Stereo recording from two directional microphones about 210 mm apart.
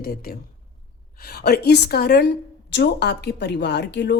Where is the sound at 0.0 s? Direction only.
45° left (ahead or behind).